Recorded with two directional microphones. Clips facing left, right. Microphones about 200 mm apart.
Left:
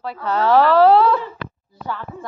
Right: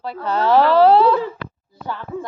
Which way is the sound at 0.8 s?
30° right (ahead or behind).